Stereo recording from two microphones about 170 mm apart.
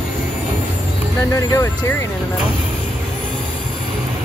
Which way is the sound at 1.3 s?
15° left (ahead or behind).